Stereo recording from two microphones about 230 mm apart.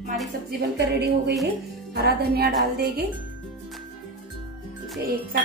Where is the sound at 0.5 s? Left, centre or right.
Right.